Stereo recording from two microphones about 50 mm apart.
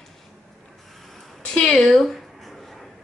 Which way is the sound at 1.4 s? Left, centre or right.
Centre.